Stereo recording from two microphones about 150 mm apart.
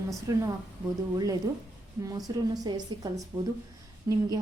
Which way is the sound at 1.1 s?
25° right (ahead or behind).